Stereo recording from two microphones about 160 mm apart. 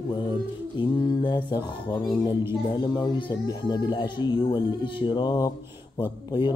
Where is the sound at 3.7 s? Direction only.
25° left (ahead or behind).